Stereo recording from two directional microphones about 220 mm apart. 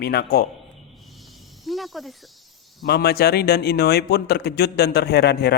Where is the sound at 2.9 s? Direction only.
45° left (ahead or behind).